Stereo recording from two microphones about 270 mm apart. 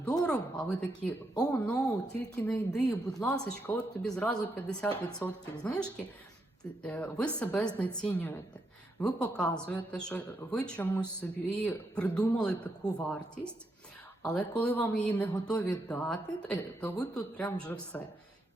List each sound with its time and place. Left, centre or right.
0.0 s a sound: centre
0.3 s speech: centre
6.8 s speech: centre